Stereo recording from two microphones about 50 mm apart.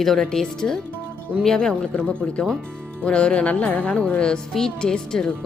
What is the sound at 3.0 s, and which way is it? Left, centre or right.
Music, centre.